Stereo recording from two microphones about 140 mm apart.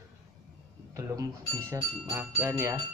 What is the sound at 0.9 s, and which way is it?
Speech, 20° right (ahead or behind).